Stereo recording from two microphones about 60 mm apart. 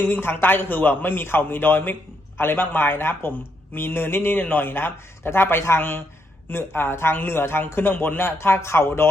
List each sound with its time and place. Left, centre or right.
0.0 s a man's voice: left